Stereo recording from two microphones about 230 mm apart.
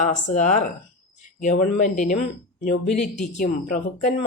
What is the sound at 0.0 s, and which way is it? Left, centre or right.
A woman's voice, left.